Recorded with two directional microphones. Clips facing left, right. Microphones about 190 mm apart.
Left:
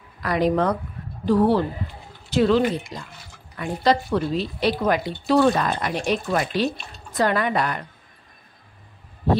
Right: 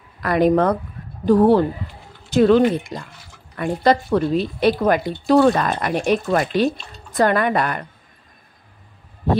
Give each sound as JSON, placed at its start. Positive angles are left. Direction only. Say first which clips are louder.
{"t": 0.2, "sound": "speech", "louder": "right 5 dB", "side_deg": -55}